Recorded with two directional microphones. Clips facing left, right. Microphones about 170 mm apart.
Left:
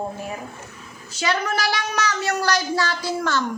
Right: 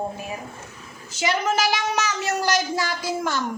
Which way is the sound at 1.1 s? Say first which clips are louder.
Right 1 dB; 20° right (ahead or behind).